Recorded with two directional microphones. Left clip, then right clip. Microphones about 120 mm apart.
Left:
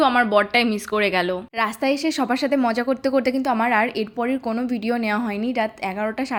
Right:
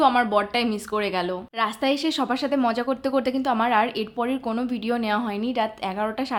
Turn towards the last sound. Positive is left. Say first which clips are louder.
# left 1 dB
turn(degrees=20)  # may be behind; listen again after turning